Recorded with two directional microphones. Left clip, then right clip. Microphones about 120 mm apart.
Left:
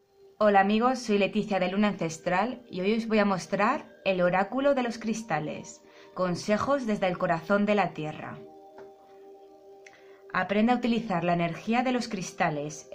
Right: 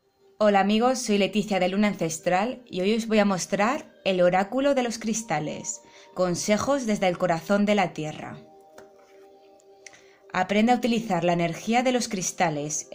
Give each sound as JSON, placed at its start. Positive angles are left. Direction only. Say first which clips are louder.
{"t": 0.4, "sound": "a woman's voice", "louder": "right 1 dB", "side_deg": -40}
{"t": 9.8, "sound": "a woman's voice", "louder": "right 3 dB", "side_deg": -50}